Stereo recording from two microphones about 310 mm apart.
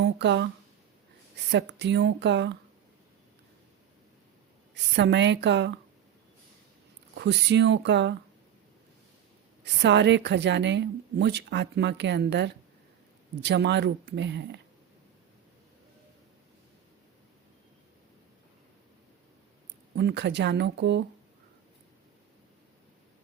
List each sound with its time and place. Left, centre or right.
0.0 s speech: right
1.5 s a woman's voice: right
4.7 s a woman's voice: right
7.2 s a woman's voice: right
9.6 s a woman's voice: right
20.0 s a woman's voice: right